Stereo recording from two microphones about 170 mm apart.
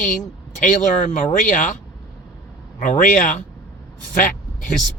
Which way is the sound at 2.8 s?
50° left (ahead or behind).